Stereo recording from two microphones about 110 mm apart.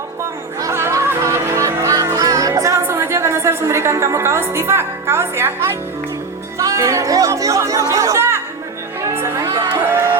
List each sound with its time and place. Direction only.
0.6 s music: 25° right (ahead or behind)
6.6 s speech: 30° right (ahead or behind)
9.0 s music: 25° right (ahead or behind)